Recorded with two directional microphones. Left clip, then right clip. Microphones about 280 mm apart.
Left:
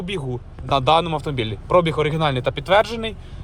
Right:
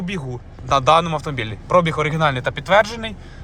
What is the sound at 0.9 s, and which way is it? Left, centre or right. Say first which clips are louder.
Speech: right 2 dB; right.